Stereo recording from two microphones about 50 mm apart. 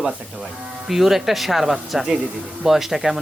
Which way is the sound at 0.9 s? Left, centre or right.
Centre.